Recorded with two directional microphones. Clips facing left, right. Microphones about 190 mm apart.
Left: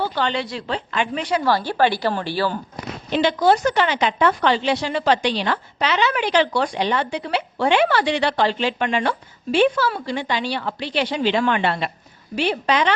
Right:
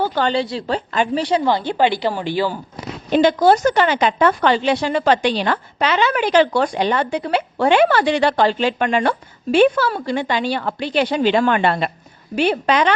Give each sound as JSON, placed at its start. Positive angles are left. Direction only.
{"t": 0.0, "sound": "speech", "side_deg": -45}
{"t": 0.3, "sound": "a woman's voice", "side_deg": -30}
{"t": 1.5, "sound": "a woman's voice", "side_deg": -20}
{"t": 3.1, "sound": "a woman's voice", "side_deg": -45}